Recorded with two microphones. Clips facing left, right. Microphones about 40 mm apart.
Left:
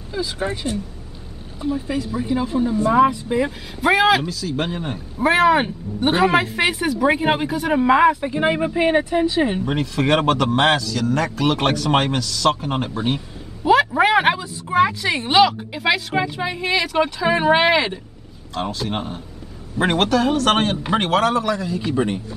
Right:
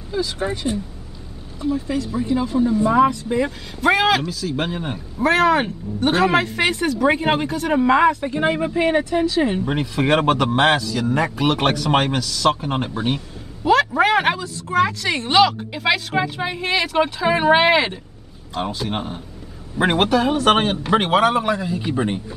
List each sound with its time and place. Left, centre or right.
0.4 s speech: centre
5.2 s speech: centre
9.7 s speech: centre
11.4 s speech: centre
13.7 s speech: centre